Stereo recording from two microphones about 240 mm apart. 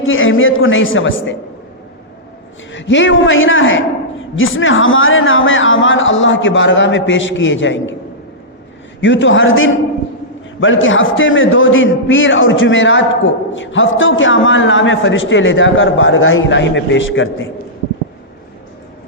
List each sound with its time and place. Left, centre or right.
0.0 s a woman's voice: left
2.7 s a man's voice: left
9.0 s a man's voice: left